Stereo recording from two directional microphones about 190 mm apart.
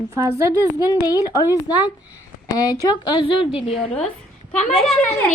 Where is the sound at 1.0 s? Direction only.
20° left (ahead or behind).